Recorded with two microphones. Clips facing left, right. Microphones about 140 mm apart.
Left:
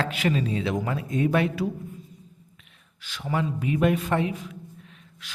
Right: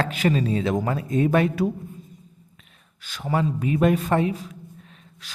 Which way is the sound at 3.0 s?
45° right (ahead or behind).